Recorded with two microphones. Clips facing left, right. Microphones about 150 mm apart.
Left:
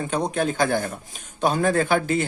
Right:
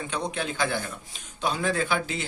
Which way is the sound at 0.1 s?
45° left (ahead or behind).